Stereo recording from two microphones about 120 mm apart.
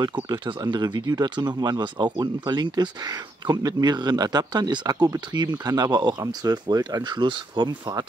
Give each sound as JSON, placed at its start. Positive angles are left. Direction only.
{"t": 0.0, "sound": "speech", "side_deg": -40}